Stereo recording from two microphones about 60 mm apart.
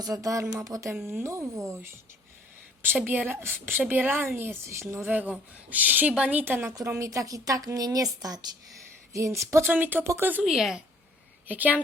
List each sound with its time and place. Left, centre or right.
0.0 s speech: right
1.0 s speech: right
3.1 s a woman's voice: right
4.7 s speech: right
5.0 s a woman's voice: right
6.7 s a woman's voice: right
9.1 s speech: right
9.7 s a woman's voice: right
10.4 s a woman's voice: centre
11.4 s speech: right